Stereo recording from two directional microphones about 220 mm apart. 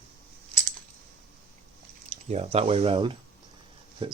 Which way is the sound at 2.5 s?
25° right (ahead or behind).